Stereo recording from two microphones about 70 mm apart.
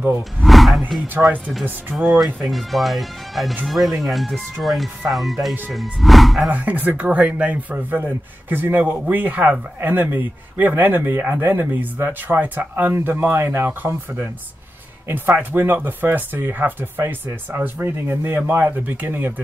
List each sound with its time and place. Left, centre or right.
0.4 s speech: centre
1.1 s a man's voice: right
2.4 s speech: centre
6.5 s a man's voice: right